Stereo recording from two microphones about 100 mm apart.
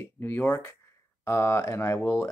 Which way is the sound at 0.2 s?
20° left (ahead or behind).